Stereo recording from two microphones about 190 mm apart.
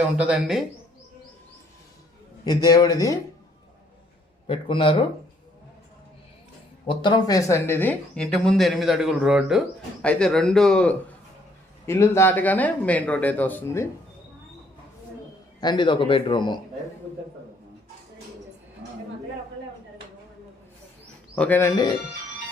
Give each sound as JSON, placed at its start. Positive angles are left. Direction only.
{"t": 0.2, "sound": "speech", "side_deg": -5}
{"t": 2.4, "sound": "a man's voice", "side_deg": 20}
{"t": 4.4, "sound": "a man's voice", "side_deg": 25}
{"t": 6.8, "sound": "speech", "side_deg": 25}
{"t": 15.6, "sound": "a man's voice", "side_deg": 25}
{"t": 21.3, "sound": "speech", "side_deg": 10}